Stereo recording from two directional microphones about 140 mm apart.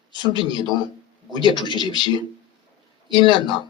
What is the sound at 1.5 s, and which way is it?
Speech, 35° left (ahead or behind).